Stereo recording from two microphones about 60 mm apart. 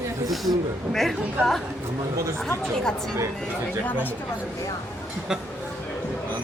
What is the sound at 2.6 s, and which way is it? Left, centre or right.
Speech, centre.